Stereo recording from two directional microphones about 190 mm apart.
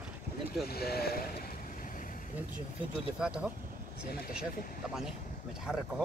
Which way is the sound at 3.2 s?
5° right (ahead or behind).